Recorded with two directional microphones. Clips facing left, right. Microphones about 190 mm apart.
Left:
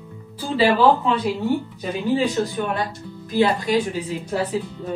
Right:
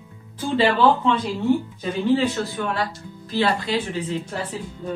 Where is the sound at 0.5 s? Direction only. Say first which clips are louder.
Left 2 dB; 5° left (ahead or behind).